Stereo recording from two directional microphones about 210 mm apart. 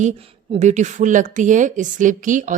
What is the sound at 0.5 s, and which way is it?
A woman's voice, 35° right (ahead or behind).